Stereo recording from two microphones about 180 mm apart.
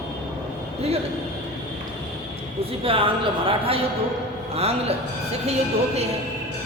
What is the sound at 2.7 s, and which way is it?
A woman's voice, 30° right (ahead or behind).